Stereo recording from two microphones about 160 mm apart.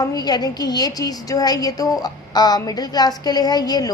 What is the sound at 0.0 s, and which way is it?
A woman's voice, 25° left (ahead or behind).